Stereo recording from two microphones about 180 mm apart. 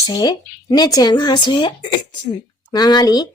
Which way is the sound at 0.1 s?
20° left (ahead or behind).